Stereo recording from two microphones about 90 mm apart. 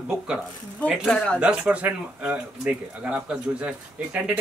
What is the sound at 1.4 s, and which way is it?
A man's voice, 15° right (ahead or behind).